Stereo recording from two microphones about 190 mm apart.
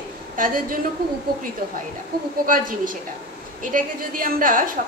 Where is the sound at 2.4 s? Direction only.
45° right (ahead or behind).